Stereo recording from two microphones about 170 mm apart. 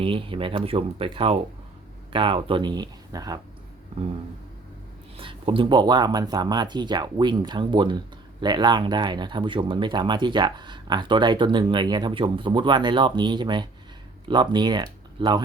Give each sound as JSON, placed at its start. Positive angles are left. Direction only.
{"t": 0.0, "sound": "speech", "side_deg": -30}
{"t": 5.1, "sound": "speech", "side_deg": -30}